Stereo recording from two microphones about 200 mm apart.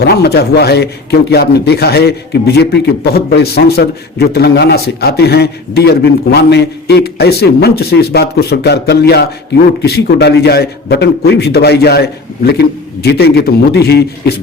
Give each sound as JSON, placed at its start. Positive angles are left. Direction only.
{"t": 0.0, "sound": "a man's voice", "side_deg": 55}